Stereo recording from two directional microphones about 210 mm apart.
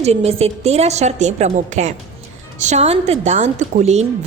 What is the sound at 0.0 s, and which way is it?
A woman's voice, 30° right (ahead or behind).